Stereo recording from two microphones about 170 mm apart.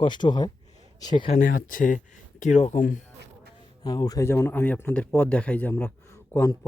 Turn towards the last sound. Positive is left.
turn(degrees=15)  # may be behind; listen again after turning